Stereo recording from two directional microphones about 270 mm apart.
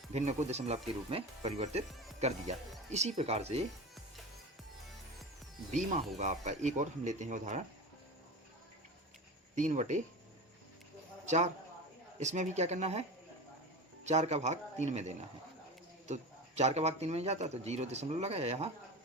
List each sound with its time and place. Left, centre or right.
0.1 s a man's voice: right
5.7 s a man's voice: right
9.6 s a man's voice: right
11.3 s a man's voice: right